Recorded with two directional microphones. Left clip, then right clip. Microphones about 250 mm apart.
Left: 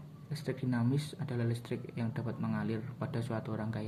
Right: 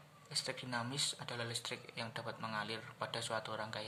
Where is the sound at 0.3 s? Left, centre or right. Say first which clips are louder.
Left 1 dB; centre.